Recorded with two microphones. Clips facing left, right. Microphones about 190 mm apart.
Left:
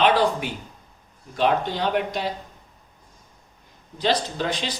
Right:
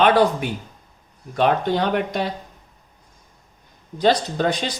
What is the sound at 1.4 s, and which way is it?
Speech, 55° right (ahead or behind).